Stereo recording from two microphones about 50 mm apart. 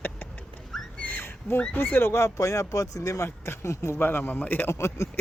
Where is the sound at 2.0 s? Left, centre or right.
Left.